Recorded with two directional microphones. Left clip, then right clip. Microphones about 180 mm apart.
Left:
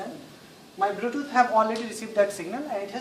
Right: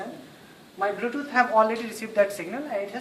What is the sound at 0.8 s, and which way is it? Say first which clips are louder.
A woman's voice: left 1 dB; 15° right (ahead or behind).